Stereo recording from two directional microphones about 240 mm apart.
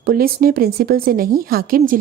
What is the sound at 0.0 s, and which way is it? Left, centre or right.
A woman's voice, right.